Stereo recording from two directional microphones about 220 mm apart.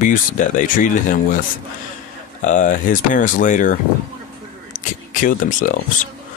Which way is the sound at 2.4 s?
35° left (ahead or behind).